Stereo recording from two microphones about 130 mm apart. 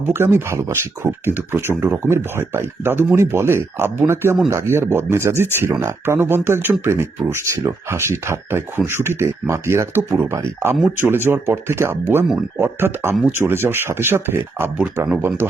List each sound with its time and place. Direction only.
0.0 s speech: 20° right (ahead or behind)